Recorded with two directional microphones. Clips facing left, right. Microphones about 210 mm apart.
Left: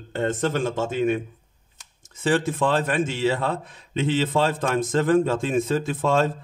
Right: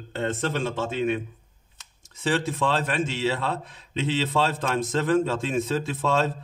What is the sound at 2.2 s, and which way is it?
A man's voice, 50° left (ahead or behind).